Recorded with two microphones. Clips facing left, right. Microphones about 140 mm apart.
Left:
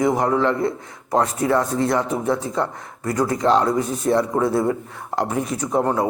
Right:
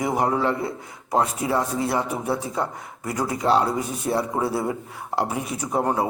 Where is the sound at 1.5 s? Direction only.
5° right (ahead or behind).